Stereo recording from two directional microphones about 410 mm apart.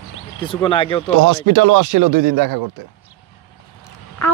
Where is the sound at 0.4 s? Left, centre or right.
Centre.